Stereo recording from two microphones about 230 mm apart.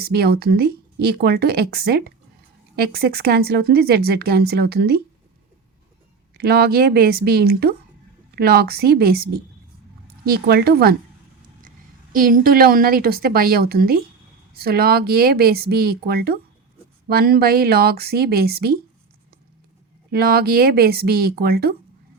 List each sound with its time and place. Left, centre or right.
0.0 s speech: right
6.3 s speech: right
12.1 s a woman's voice: right
20.1 s a woman's voice: right